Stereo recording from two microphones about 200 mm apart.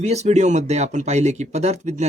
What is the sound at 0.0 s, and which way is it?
Speech, 35° right (ahead or behind).